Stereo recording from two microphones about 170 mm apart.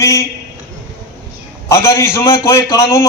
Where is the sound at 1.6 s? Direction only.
15° left (ahead or behind).